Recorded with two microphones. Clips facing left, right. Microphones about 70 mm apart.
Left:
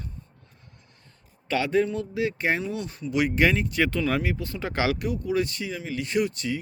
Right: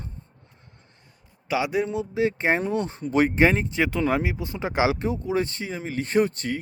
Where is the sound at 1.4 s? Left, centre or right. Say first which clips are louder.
Left 1 dB; centre.